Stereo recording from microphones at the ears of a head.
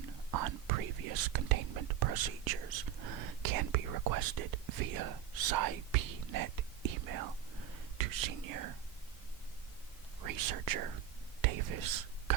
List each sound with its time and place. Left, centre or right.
0.0 s whispering: right
10.2 s speech: right